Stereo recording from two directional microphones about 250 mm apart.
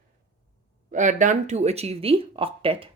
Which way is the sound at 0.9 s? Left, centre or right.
Right.